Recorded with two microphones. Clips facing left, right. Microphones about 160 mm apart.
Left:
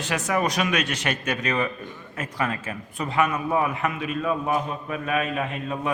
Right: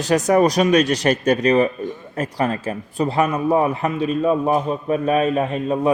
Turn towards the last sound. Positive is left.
turn(degrees=-35)  # may be behind; listen again after turning